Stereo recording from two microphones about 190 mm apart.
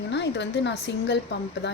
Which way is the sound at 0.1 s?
65° left (ahead or behind).